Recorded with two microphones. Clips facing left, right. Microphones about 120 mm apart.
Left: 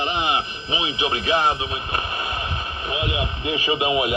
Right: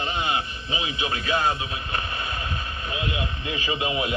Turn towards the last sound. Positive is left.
turn(degrees=15)  # may be behind; listen again after turning